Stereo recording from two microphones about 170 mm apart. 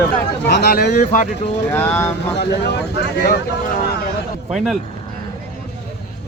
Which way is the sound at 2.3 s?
80° left.